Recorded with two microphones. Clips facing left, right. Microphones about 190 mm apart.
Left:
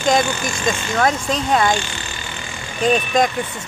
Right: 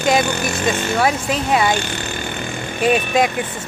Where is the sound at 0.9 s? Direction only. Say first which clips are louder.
Right 1 dB; 10° right (ahead or behind).